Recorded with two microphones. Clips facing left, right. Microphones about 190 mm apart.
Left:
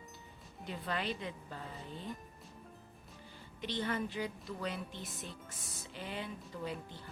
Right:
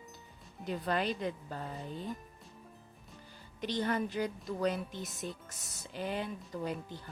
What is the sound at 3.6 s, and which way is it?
A woman's voice, 40° right (ahead or behind).